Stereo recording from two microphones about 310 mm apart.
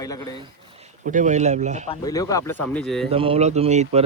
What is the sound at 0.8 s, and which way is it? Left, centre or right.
Speech, right.